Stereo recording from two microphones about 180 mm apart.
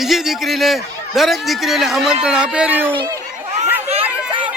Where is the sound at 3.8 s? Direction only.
35° right (ahead or behind).